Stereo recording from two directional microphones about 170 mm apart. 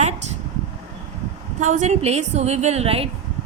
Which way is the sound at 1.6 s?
45° right (ahead or behind).